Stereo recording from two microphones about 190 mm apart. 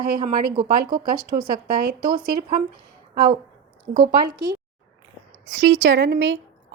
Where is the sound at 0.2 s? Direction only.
25° right (ahead or behind).